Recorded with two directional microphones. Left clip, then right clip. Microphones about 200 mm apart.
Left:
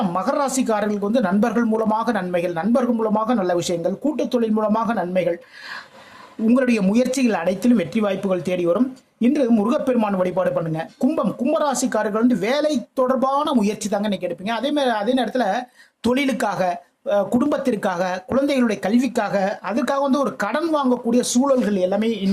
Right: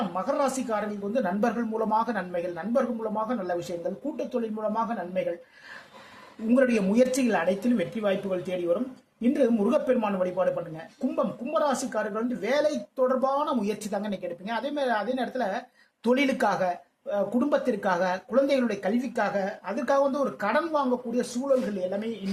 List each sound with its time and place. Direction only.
0.1 s speech: 40° left (ahead or behind)
6.5 s speech: 45° left (ahead or behind)